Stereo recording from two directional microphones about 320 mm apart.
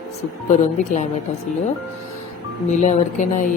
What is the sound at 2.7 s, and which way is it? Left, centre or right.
Speech, left.